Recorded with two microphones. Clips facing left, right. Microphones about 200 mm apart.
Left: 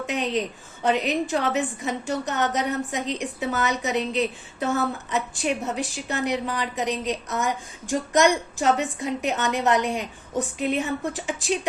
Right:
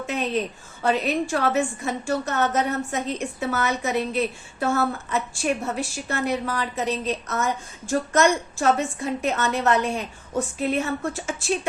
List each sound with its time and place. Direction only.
0.0 s a woman's voice: 15° left (ahead or behind)